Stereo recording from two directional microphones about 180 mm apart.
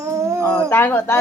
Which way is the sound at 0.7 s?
15° left (ahead or behind).